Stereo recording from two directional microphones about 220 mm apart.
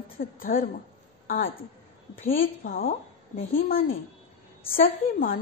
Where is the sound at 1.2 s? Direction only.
40° left (ahead or behind).